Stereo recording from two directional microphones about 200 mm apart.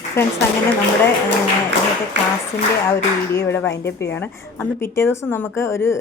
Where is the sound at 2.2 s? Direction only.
60° right (ahead or behind).